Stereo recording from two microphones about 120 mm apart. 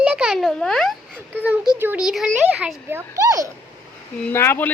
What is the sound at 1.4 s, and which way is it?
A child's voice, 15° right (ahead or behind).